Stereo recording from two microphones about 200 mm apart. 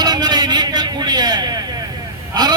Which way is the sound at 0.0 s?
20° right (ahead or behind).